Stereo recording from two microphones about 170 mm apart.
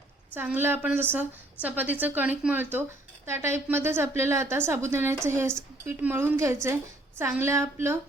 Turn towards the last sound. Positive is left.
turn(degrees=-15)  # may be behind; listen again after turning